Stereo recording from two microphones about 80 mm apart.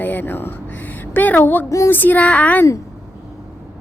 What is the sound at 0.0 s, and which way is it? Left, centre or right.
A woman's voice, left.